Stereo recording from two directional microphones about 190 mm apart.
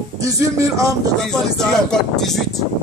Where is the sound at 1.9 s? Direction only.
Centre (ahead or behind).